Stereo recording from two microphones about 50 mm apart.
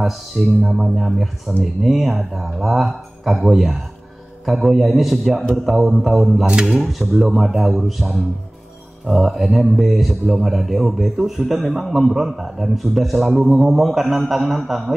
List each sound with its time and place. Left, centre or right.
0.0 s a man's voice: centre
6.4 s speech: centre
6.8 s a man's voice: centre